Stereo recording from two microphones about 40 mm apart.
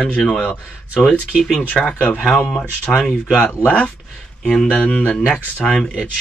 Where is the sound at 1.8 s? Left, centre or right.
Left.